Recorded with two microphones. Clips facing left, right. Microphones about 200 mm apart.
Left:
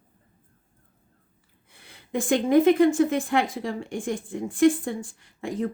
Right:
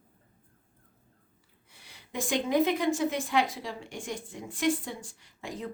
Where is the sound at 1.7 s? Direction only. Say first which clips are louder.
Left 10 dB; 55° left (ahead or behind).